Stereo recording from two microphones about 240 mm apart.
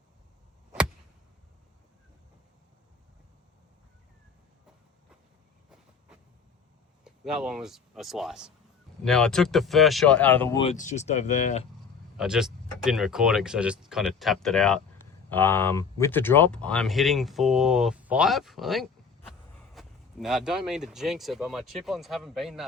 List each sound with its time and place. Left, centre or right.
7.0 s speech: centre
10.6 s speech: left
12.1 s speech: centre